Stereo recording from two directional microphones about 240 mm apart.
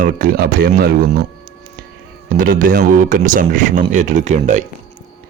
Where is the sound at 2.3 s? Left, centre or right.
Right.